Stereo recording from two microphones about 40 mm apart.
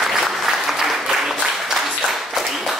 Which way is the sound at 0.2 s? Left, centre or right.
Centre.